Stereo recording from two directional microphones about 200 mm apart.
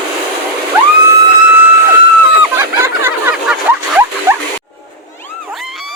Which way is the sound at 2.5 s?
10° right (ahead or behind).